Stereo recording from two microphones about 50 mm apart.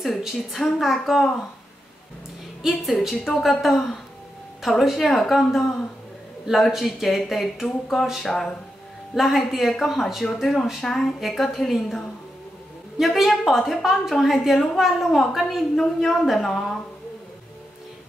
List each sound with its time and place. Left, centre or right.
0.0 s a woman's voice: centre
2.6 s a woman's voice: centre
5.0 s speech: centre
5.3 s a woman's voice: centre
6.7 s a woman's voice: centre
10.4 s a woman's voice: centre
13.0 s a woman's voice: centre